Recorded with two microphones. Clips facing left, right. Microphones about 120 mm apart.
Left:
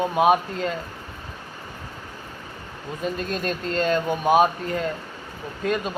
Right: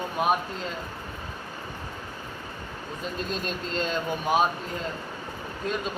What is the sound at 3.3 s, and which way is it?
Speech, 50° left (ahead or behind).